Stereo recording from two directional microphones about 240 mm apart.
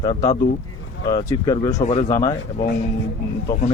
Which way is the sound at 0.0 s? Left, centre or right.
Centre.